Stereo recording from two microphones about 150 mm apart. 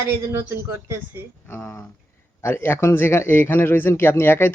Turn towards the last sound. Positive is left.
turn(degrees=15)  # may be behind; listen again after turning